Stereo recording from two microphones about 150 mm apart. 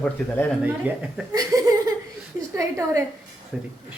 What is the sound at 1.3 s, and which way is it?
Laughter, 25° right (ahead or behind).